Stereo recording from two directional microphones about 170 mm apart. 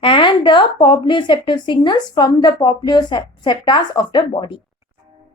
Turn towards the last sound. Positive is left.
turn(degrees=25)  # may be behind; listen again after turning